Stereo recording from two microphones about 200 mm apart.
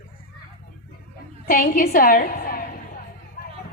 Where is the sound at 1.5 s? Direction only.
45° left (ahead or behind).